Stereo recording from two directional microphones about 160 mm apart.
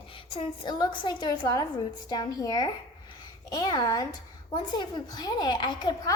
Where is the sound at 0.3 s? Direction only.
30° left (ahead or behind).